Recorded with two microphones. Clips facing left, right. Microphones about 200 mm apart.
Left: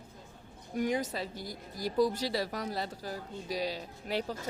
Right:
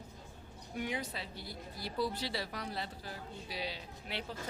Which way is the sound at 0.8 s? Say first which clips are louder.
Left 8 dB; 45° left (ahead or behind).